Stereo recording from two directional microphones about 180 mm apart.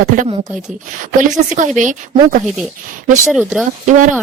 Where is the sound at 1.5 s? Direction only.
45° right (ahead or behind).